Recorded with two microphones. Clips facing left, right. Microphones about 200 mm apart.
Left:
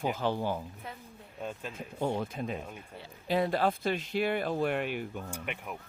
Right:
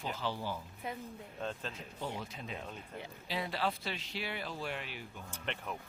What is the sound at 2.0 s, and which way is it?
Speech, 50° left (ahead or behind).